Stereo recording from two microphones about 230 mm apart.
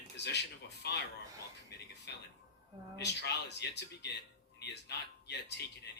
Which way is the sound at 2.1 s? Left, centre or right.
Left.